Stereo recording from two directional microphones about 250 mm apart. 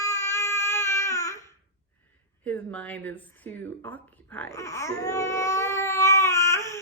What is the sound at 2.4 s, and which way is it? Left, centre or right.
Speech, centre.